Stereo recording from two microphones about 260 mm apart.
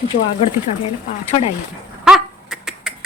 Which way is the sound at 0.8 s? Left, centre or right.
Left.